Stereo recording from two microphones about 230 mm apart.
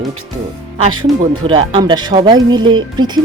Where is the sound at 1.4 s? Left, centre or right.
Right.